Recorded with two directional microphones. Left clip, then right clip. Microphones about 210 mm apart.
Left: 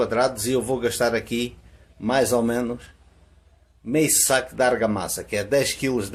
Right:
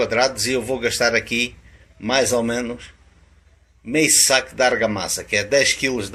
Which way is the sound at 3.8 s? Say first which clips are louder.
Right 4 dB; 20° left (ahead or behind).